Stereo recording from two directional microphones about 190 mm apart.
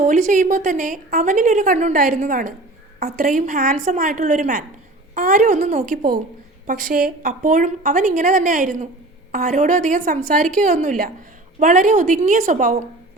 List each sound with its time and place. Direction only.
0.0 s a woman's voice: 45° right (ahead or behind)